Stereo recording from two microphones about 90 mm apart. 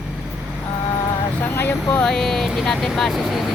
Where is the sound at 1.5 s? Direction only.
25° left (ahead or behind).